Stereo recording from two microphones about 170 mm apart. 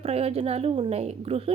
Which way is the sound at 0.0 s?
35° right (ahead or behind).